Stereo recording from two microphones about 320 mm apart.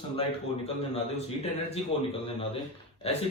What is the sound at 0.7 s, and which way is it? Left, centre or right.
A man's voice, centre.